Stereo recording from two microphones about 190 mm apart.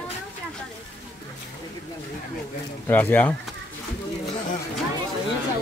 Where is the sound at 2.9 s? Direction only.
10° left (ahead or behind).